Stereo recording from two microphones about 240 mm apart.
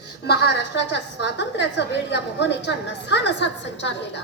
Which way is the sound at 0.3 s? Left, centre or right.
Left.